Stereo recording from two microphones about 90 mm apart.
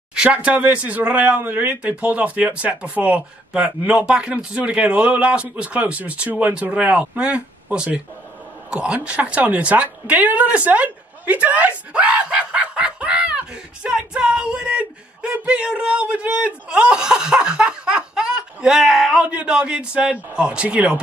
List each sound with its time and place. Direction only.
0.1 s speech: 10° right (ahead or behind)
19.2 s speech: 10° right (ahead or behind)